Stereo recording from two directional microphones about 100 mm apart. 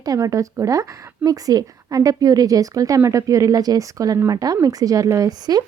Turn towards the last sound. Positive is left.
turn(degrees=-40)  # may be behind; listen again after turning